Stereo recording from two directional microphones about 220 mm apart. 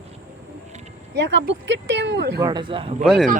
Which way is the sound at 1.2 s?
55° right (ahead or behind).